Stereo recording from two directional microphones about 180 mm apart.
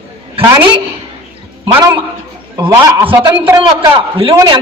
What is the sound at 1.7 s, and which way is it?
A man's voice, 20° right (ahead or behind).